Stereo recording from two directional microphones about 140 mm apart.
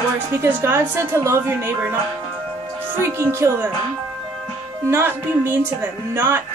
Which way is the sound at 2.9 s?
20° right (ahead or behind).